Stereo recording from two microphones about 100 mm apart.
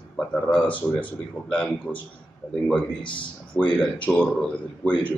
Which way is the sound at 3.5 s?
20° left (ahead or behind).